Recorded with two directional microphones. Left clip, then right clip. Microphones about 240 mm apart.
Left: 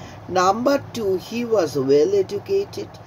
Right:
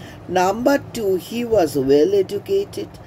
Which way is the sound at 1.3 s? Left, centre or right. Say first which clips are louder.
Right 4 dB; centre.